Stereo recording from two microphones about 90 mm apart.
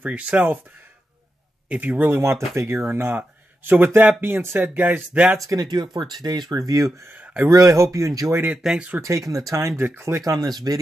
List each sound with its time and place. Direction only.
0.0 s speech: 15° right (ahead or behind)
1.7 s a man's voice: 20° right (ahead or behind)
5.4 s speech: 40° right (ahead or behind)
7.1 s speech: 15° right (ahead or behind)
7.4 s speech: 35° right (ahead or behind)
8.5 s speech: 10° right (ahead or behind)
9.0 s speech: 35° right (ahead or behind)
10.2 s speech: 45° right (ahead or behind)